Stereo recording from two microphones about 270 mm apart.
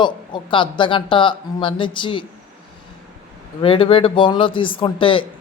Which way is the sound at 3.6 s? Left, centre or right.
Centre.